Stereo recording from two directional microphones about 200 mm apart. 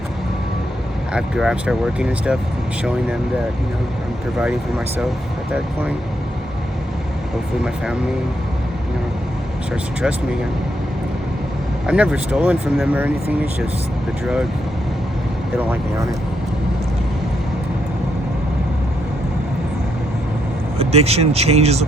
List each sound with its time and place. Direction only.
1.1 s speech: 5° right (ahead or behind)
11.9 s speech: 5° right (ahead or behind)
15.5 s speech: 10° right (ahead or behind)
20.7 s speech: 30° right (ahead or behind)